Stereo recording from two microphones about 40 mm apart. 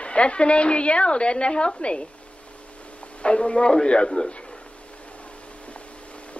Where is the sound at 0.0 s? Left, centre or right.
Left.